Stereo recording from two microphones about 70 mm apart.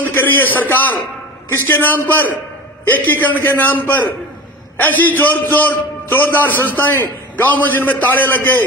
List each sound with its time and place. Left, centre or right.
0.0 s a man's voice: left